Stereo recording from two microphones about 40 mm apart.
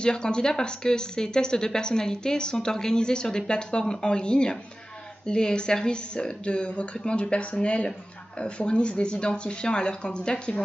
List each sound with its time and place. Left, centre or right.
0.0 s speech: left